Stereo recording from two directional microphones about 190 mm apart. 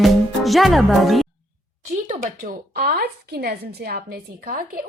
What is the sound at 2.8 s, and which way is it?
Speech, 55° right (ahead or behind).